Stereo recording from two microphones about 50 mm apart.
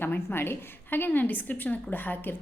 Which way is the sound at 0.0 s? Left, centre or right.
Left.